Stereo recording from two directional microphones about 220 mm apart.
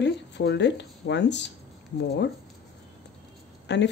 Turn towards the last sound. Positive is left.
turn(degrees=50)  # may be behind; listen again after turning